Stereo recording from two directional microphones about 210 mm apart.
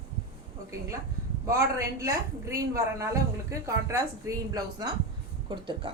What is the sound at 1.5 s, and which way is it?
A woman's voice, 15° right (ahead or behind).